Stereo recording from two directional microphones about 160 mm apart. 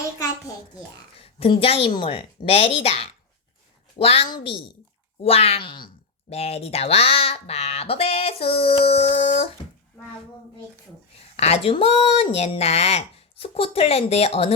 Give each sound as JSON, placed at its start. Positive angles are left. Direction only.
{"t": 1.2, "sound": "speech", "side_deg": 35}
{"t": 6.3, "sound": "speech", "side_deg": 40}
{"t": 11.3, "sound": "speech", "side_deg": 40}